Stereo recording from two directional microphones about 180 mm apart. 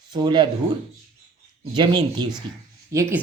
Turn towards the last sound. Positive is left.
turn(degrees=-15)  # may be behind; listen again after turning